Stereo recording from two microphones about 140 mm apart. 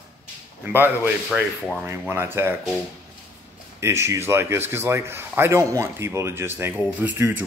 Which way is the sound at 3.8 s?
20° right (ahead or behind).